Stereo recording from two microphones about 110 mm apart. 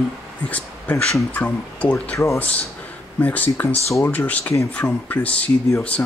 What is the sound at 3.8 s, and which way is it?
Speech, 25° left (ahead or behind).